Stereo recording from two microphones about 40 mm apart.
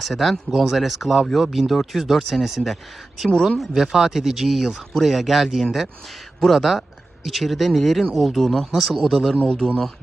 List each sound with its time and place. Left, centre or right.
0.0 s speech: centre
9.4 s a man's voice: centre